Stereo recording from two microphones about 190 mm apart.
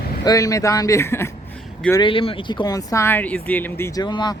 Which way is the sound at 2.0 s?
30° left (ahead or behind).